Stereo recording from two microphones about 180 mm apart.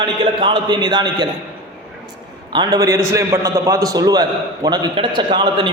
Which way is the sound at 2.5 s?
20° right (ahead or behind).